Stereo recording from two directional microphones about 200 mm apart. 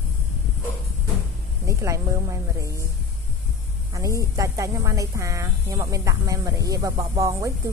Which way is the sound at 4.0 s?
15° right (ahead or behind).